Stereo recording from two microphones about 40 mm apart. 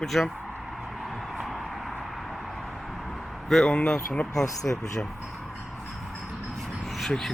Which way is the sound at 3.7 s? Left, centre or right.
Left.